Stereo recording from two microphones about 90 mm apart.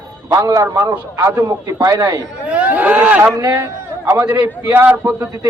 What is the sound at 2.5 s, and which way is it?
Speech, 15° right (ahead or behind).